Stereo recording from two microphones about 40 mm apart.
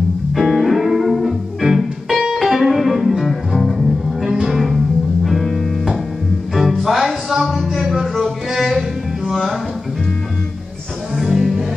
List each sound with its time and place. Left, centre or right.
0.4 s music: centre
4.3 s music: centre
4.6 s music: centre
11.1 s music: centre